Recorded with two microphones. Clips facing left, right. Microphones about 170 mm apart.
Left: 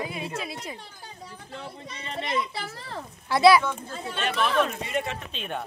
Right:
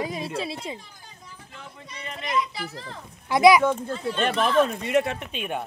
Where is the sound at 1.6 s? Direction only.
30° left (ahead or behind).